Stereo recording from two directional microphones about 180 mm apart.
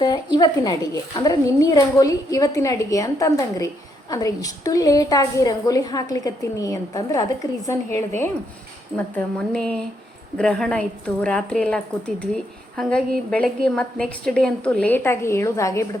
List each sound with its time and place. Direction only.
0.0 s a woman's voice: 25° left (ahead or behind)